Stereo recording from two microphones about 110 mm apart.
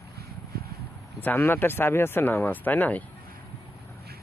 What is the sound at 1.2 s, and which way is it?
Speech, 15° left (ahead or behind).